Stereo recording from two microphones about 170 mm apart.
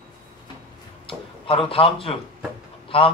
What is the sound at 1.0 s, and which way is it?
A man's voice, 30° left (ahead or behind).